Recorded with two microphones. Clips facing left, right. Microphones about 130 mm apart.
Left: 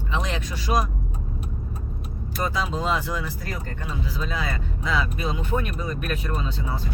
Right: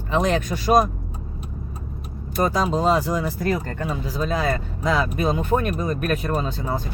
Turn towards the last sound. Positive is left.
turn(degrees=-45)  # may be behind; listen again after turning